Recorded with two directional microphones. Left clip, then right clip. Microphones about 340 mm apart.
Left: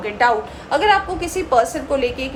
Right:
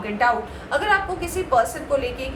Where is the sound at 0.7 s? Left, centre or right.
Left.